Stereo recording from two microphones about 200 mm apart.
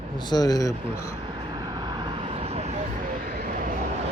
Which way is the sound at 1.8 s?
25° right (ahead or behind).